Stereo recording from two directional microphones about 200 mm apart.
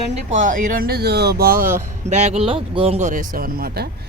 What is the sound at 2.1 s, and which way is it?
Speech, 35° right (ahead or behind).